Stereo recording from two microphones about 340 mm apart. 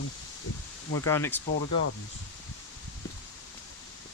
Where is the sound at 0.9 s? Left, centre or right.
Centre.